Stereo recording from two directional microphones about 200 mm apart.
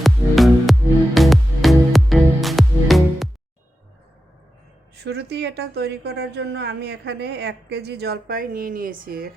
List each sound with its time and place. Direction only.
0.0 s music: centre (ahead or behind)
5.0 s a woman's voice: 55° right (ahead or behind)